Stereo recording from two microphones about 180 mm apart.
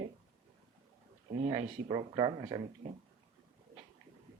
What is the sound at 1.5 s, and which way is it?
Speech, 20° right (ahead or behind).